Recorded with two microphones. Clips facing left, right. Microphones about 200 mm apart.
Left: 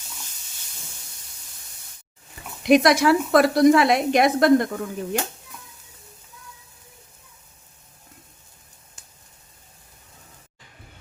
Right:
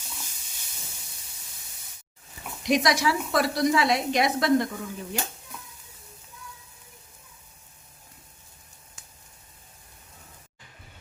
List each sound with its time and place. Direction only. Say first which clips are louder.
2.6 s a woman's voice: left 8 dB; 60° left (ahead or behind)